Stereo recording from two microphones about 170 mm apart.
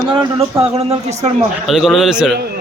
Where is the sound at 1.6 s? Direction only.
Centre (ahead or behind).